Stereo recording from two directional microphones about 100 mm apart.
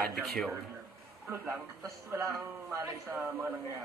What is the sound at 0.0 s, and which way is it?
Speech, centre (ahead or behind).